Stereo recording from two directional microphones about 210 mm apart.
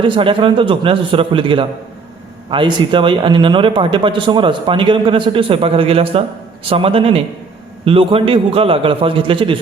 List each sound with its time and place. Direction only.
0.0 s speech: 25° right (ahead or behind)